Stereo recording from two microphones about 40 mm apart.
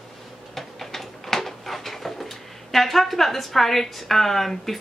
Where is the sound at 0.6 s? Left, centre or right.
Centre.